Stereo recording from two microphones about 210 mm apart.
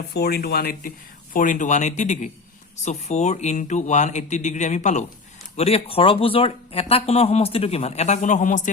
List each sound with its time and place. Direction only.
0.1 s speech: 50° left (ahead or behind)